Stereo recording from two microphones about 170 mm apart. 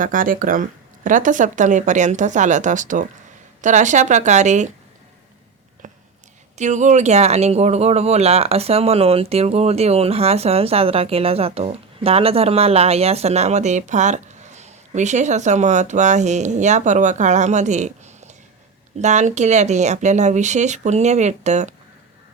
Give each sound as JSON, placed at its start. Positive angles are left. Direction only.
{"t": 0.0, "sound": "speech", "side_deg": -55}
{"t": 6.6, "sound": "speech", "side_deg": -45}